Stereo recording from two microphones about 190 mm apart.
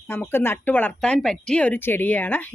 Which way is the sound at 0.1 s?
10° left (ahead or behind).